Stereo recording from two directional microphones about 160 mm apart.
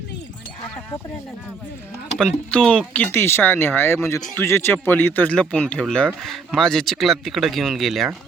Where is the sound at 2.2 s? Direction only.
5° left (ahead or behind).